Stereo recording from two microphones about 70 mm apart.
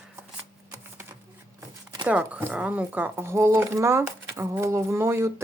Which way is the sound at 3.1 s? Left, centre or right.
Right.